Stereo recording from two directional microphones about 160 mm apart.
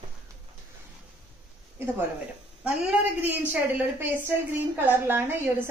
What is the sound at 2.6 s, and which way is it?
A woman's voice, 10° right (ahead or behind).